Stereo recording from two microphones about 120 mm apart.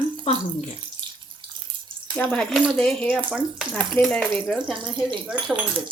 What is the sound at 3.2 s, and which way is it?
Speech, 10° right (ahead or behind).